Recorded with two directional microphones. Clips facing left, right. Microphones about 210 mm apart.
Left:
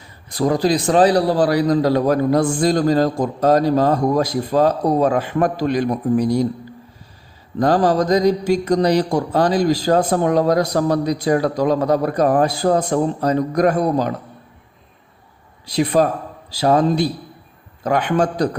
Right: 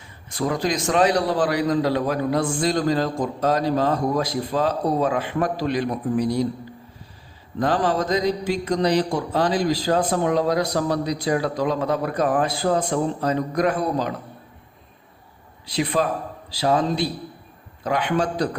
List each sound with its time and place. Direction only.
0.3 s a man's voice: 35° left (ahead or behind)
7.6 s speech: 40° left (ahead or behind)
15.6 s speech: 40° left (ahead or behind)